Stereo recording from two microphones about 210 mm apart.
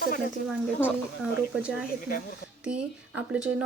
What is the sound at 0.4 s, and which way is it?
A woman's voice, 5° right (ahead or behind).